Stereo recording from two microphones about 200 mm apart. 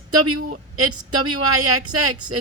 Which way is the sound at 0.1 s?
90° right.